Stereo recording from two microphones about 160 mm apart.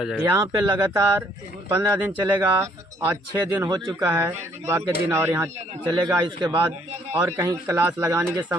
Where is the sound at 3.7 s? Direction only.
25° right (ahead or behind).